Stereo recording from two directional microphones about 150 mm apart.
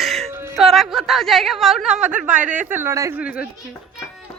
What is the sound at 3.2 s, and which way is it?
Speech, 10° right (ahead or behind).